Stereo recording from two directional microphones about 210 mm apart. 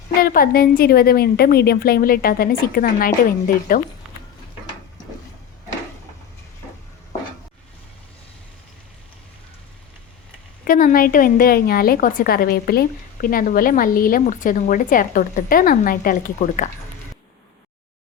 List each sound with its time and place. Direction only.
0.2 s a woman's voice: 45° left (ahead or behind)
10.7 s a woman's voice: 40° left (ahead or behind)